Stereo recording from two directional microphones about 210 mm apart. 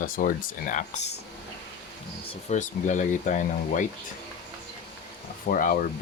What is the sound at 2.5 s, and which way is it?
Speech, 35° left (ahead or behind).